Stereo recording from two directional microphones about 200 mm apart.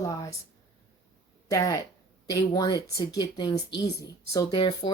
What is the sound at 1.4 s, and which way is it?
Speech, 15° left (ahead or behind).